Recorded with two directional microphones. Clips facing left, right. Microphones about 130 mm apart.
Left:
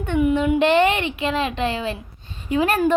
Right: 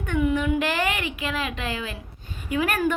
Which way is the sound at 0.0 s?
20° left (ahead or behind).